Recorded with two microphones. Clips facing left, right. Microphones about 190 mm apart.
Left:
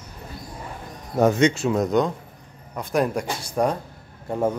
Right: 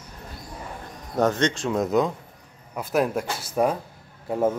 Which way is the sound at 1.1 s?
10° left (ahead or behind).